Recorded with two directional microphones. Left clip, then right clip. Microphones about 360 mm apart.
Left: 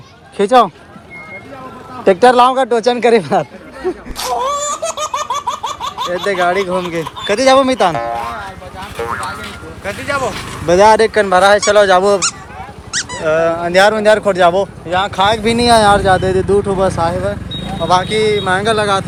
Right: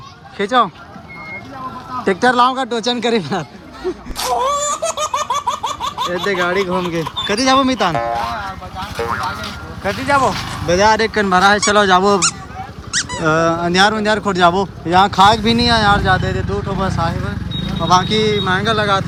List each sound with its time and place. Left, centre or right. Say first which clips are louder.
2.0 s speech: left 5 dB; centre
4.2 s laughter: even; centre
9.0 s music: even; centre
9.8 s speech: right 3 dB; centre
10.7 s speech: left 5 dB; centre
12.9 s squeak: even; centre
13.2 s speech: left 2 dB; centre